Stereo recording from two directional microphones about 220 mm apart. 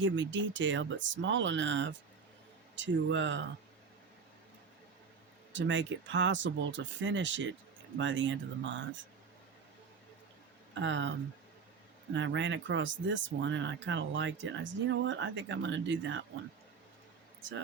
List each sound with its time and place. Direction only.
0.0 s speech: 55° right (ahead or behind)
5.5 s speech: 55° right (ahead or behind)
10.8 s speech: 55° right (ahead or behind)
12.1 s speech: 55° right (ahead or behind)